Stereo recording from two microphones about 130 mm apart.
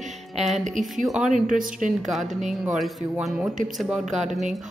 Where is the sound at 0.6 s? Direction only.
75° right (ahead or behind).